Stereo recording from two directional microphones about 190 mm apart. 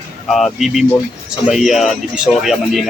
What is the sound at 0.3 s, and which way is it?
A man's voice, centre (ahead or behind).